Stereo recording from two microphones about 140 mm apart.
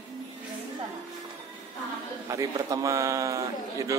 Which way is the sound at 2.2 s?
25° right (ahead or behind).